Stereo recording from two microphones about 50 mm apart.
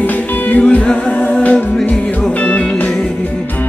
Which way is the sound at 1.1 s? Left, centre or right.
Left.